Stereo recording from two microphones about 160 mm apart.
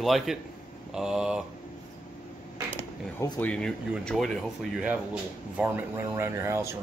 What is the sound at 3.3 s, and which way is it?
Speech, 5° left (ahead or behind).